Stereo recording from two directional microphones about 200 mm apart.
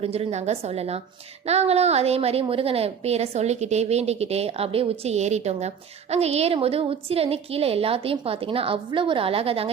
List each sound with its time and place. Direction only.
0.0 s a woman's voice: 30° right (ahead or behind)